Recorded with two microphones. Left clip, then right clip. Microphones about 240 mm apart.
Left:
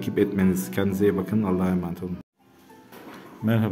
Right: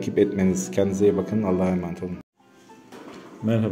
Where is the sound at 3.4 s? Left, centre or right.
Centre.